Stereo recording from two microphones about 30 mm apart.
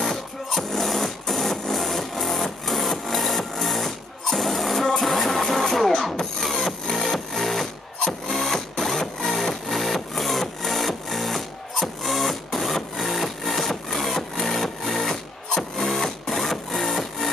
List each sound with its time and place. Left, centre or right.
0.0 s music: centre
1.3 s a sound: centre
2.7 s music: centre
4.3 s sewing machine: centre
4.9 s music: centre
15.8 s music: centre